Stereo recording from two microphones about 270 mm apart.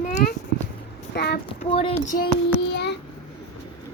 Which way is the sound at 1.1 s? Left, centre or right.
Left.